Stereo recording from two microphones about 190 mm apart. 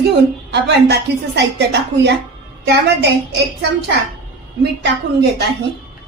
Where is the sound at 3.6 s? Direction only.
65° right (ahead or behind).